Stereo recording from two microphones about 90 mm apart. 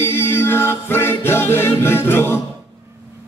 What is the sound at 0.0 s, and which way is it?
Music, 25° left (ahead or behind).